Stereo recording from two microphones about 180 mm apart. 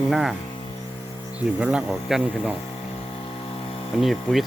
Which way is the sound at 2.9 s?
30° left (ahead or behind).